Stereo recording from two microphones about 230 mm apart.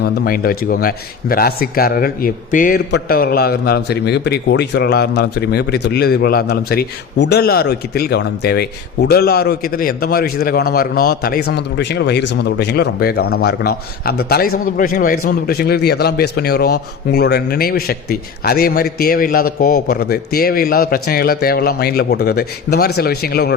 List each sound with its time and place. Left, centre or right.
0.0 s speech: left